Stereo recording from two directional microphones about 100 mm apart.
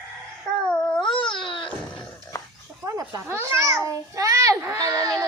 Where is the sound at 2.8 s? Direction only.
35° right (ahead or behind).